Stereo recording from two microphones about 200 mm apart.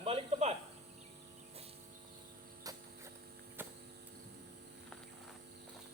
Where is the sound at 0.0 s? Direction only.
30° right (ahead or behind).